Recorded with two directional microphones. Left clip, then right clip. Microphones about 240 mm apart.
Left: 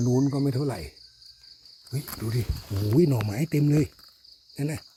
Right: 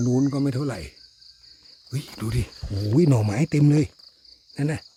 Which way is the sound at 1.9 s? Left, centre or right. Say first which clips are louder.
Right 2 dB; right.